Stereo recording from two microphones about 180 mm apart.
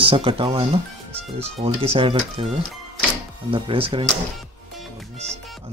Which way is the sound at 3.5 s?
30° right (ahead or behind).